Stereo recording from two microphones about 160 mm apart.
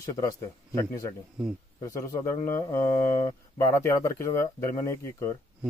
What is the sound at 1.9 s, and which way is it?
Speech, 15° left (ahead or behind).